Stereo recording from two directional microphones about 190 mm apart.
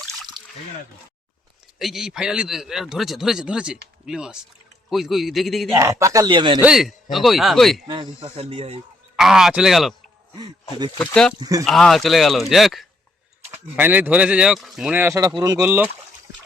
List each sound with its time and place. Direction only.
1.8 s a man's voice: centre (ahead or behind)
5.7 s speech: 15° right (ahead or behind)
6.6 s a man's voice: 5° right (ahead or behind)
7.9 s speech: 25° right (ahead or behind)
9.1 s a man's voice: centre (ahead or behind)
10.9 s speech: 5° left (ahead or behind)
11.3 s speech: 20° right (ahead or behind)
11.6 s a man's voice: centre (ahead or behind)
15.0 s speech: 15° right (ahead or behind)